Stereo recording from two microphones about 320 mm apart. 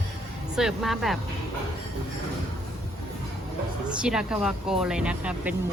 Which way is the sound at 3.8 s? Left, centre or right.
Centre.